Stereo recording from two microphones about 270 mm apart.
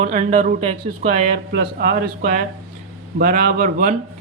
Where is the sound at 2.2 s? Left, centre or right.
Right.